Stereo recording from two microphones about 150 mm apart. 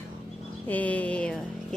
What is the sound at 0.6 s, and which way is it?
Speech, 10° left (ahead or behind).